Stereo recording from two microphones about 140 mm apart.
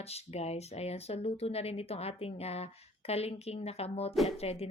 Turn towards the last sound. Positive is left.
turn(degrees=45)  # may be behind; listen again after turning